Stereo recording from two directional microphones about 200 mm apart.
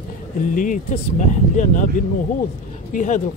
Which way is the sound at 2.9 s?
40° left (ahead or behind).